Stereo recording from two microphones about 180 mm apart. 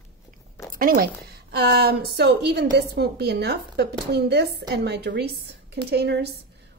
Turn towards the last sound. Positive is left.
turn(degrees=-65)  # may be behind; listen again after turning